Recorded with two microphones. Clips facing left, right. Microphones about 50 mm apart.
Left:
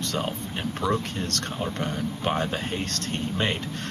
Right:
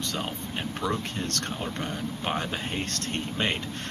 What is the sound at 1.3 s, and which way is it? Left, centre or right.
Speech, right.